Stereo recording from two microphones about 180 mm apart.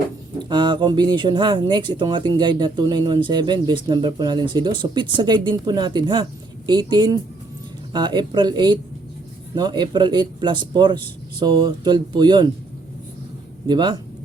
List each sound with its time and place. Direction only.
0.3 s speech: 25° right (ahead or behind)
13.7 s speech: 25° right (ahead or behind)